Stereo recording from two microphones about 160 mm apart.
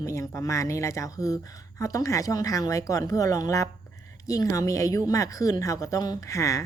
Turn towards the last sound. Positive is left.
turn(degrees=20)  # may be behind; listen again after turning